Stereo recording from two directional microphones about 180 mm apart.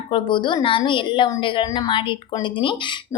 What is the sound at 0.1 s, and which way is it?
Speech, 25° left (ahead or behind).